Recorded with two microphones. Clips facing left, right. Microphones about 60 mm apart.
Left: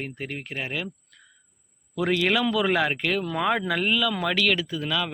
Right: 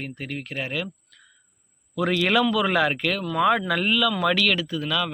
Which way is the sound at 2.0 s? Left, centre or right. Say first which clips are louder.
Right 2 dB; centre.